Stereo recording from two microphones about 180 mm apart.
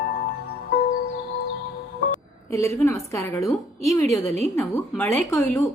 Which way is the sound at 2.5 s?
15° left (ahead or behind).